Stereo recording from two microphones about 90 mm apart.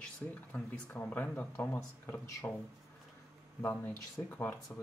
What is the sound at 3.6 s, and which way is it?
Speech, 20° left (ahead or behind).